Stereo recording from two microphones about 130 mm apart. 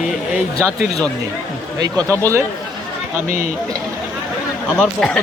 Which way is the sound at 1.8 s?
25° right (ahead or behind).